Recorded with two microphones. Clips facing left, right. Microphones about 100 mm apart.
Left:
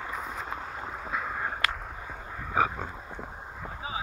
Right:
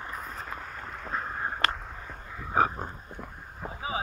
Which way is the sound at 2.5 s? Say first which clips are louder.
Right 1 dB; 35° right (ahead or behind).